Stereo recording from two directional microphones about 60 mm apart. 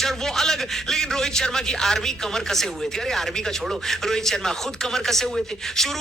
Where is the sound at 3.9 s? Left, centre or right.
Centre.